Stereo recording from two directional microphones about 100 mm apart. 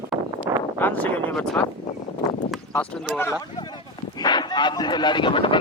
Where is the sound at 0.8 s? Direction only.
15° left (ahead or behind).